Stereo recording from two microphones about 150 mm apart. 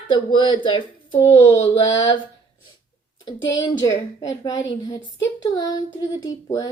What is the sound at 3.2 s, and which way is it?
A child's voice, 30° left (ahead or behind).